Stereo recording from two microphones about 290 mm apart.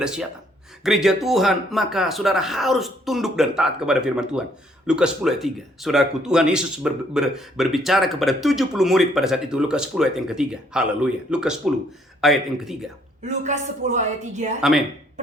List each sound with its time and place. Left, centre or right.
0.0 s speech: centre
13.2 s speech: right
14.6 s speech: centre